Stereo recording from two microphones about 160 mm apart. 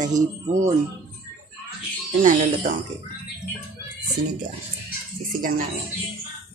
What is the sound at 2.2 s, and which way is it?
Speech, 55° right (ahead or behind).